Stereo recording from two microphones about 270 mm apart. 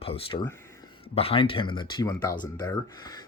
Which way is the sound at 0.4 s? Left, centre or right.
Centre.